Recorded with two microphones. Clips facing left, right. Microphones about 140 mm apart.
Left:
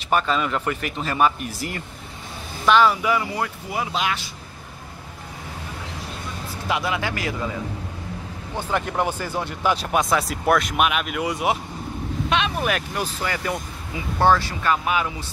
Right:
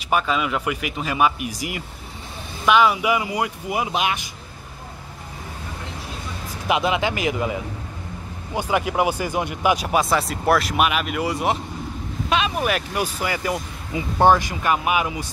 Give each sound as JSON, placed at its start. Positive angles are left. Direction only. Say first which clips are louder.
{"t": 0.1, "sound": "speech", "louder": "even", "side_deg": -5}
{"t": 6.7, "sound": "a man's voice", "louder": "right 4 dB", "side_deg": -20}
{"t": 8.5, "sound": "speech", "louder": "right 3 dB", "side_deg": -10}